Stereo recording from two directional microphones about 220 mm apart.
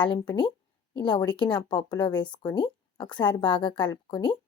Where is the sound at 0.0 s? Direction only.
20° left (ahead or behind).